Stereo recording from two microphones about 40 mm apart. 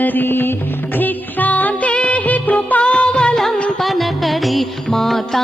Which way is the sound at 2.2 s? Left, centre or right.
Left.